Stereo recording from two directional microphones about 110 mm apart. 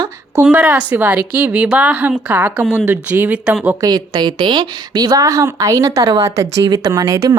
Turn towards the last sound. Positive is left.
turn(degrees=-35)  # may be behind; listen again after turning